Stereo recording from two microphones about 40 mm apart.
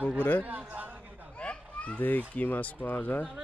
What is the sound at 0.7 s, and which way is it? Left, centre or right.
Speech, right.